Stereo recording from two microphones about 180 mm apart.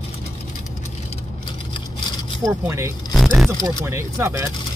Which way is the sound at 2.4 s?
15° right (ahead or behind).